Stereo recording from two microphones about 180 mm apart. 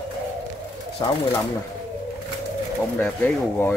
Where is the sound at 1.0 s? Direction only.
25° left (ahead or behind).